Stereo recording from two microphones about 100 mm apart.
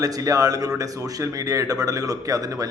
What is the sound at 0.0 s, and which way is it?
A man's voice, 35° right (ahead or behind).